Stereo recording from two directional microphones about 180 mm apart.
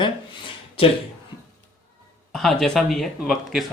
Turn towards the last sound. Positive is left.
turn(degrees=0)  # may be behind; listen again after turning